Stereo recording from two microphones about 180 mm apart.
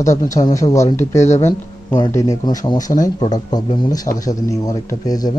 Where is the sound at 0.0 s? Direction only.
20° left (ahead or behind).